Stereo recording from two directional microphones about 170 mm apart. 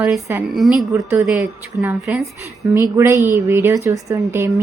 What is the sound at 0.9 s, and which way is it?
Speech, 15° right (ahead or behind).